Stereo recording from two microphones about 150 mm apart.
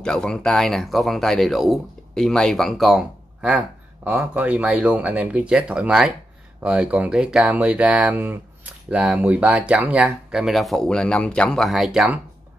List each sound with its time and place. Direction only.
0.0 s speech: 5° left (ahead or behind)